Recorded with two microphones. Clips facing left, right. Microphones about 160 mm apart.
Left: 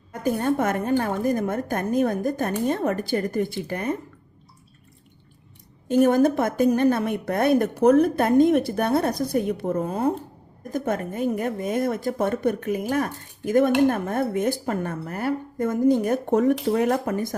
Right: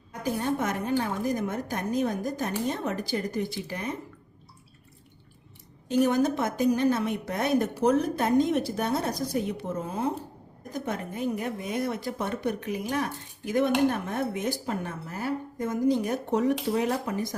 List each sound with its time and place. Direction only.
0.1 s a woman's voice: 50° left (ahead or behind)
5.9 s a woman's voice: 50° left (ahead or behind)